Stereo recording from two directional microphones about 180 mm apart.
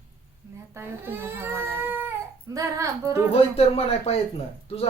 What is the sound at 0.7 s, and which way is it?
Speech, 10° right (ahead or behind).